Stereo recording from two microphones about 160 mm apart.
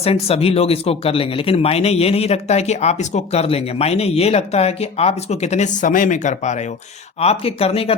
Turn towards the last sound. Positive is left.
turn(degrees=35)  # may be behind; listen again after turning